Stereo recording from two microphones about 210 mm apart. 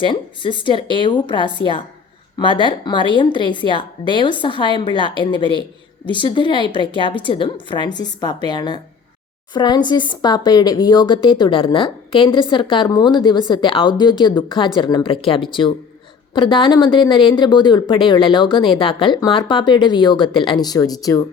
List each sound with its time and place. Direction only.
0.0 s speech: 25° left (ahead or behind)